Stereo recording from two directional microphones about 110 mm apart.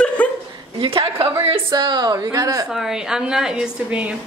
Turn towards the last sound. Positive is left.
turn(degrees=-10)  # may be behind; listen again after turning